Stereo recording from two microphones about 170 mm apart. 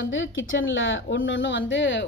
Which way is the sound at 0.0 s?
90° left.